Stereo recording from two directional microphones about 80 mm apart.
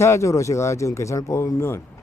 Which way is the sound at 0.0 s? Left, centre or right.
Left.